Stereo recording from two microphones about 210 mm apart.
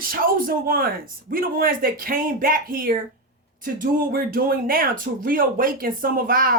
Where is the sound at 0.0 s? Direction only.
45° right (ahead or behind).